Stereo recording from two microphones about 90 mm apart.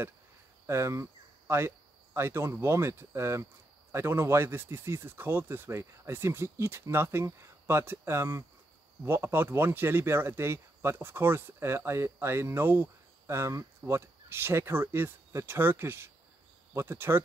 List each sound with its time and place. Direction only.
0.7 s speech: 30° right (ahead or behind)